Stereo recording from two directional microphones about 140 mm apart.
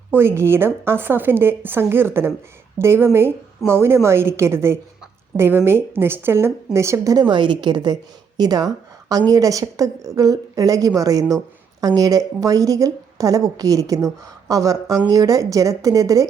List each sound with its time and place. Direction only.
0.1 s a woman's voice: 15° right (ahead or behind)